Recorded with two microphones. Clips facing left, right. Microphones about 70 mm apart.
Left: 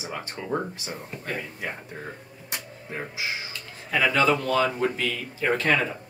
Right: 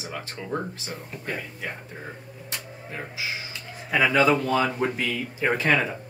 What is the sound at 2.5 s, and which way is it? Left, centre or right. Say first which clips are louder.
Music: left 1 dB; centre.